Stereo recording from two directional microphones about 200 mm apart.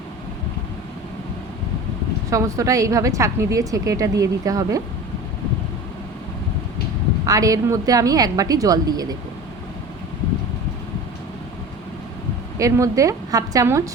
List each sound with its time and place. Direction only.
2.3 s a woman's voice: 15° right (ahead or behind)
7.3 s a woman's voice: 15° right (ahead or behind)
12.5 s a woman's voice: 15° right (ahead or behind)